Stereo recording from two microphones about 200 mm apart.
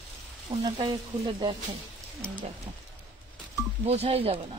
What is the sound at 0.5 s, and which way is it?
Speech, 25° right (ahead or behind).